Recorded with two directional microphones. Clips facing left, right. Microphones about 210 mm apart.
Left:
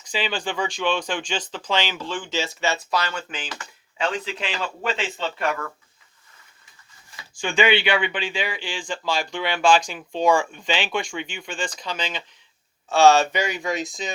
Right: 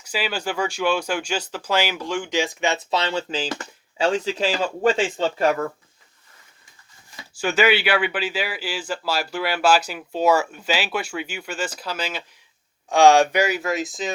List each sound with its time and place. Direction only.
0.0 s speech: 10° right (ahead or behind); by 5.5 s 40° right (ahead or behind)
7.3 s speech: 5° right (ahead or behind)